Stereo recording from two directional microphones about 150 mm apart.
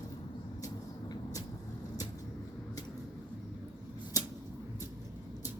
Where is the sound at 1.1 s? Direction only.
25° left (ahead or behind).